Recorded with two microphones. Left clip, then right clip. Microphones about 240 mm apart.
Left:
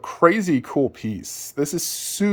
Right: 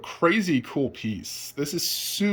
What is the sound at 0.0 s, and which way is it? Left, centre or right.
Speech, left.